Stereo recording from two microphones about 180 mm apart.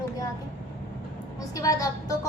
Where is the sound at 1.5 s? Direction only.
20° left (ahead or behind).